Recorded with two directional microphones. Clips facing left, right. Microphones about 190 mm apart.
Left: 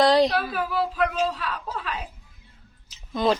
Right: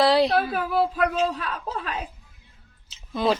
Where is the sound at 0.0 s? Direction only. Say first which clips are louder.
Left 1 dB; centre (ahead or behind).